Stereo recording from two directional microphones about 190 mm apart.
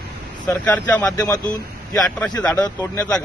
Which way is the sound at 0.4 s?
10° left (ahead or behind).